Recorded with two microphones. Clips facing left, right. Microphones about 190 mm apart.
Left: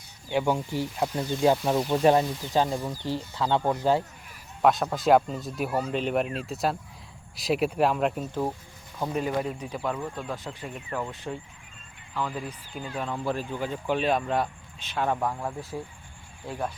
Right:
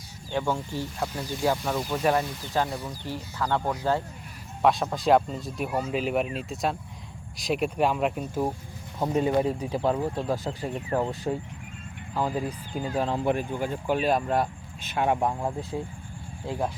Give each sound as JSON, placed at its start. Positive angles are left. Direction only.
{"t": 0.3, "sound": "speech", "side_deg": 15}
{"t": 4.6, "sound": "speech", "side_deg": 0}
{"t": 9.0, "sound": "speech", "side_deg": -25}
{"t": 13.2, "sound": "speech", "side_deg": -15}
{"t": 14.9, "sound": "speech", "side_deg": -20}